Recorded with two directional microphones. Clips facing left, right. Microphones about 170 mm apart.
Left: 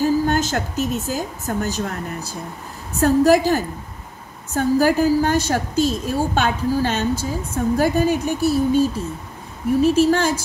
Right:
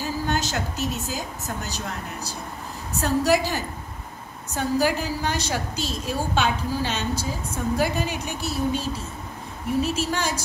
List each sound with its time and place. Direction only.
0.0 s speech: 50° left (ahead or behind)
3.0 s a woman's voice: 50° left (ahead or behind)
9.8 s a woman's voice: 50° left (ahead or behind)